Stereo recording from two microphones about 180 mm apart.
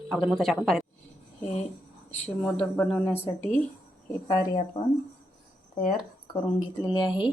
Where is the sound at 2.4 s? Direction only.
5° left (ahead or behind).